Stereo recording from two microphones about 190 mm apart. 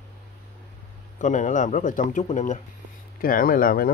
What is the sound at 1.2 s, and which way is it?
Speech, 40° left (ahead or behind).